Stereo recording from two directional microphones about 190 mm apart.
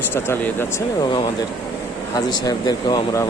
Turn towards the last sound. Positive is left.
turn(degrees=20)  # may be behind; listen again after turning